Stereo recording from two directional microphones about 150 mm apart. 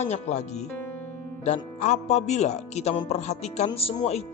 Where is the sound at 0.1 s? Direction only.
50° left (ahead or behind).